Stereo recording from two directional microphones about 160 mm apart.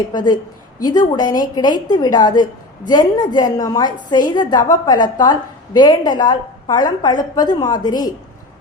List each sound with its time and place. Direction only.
0.1 s a woman's voice: 25° left (ahead or behind)